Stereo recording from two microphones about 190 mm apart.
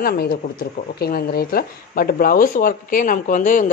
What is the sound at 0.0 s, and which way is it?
Speech, 50° left (ahead or behind).